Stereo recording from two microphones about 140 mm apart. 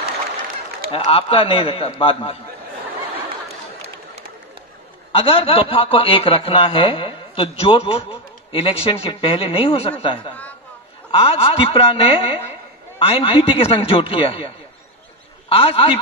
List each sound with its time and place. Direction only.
0.9 s a man's voice: 40° left (ahead or behind)
5.1 s a man's voice: 45° left (ahead or behind)
15.5 s a man's voice: 40° left (ahead or behind)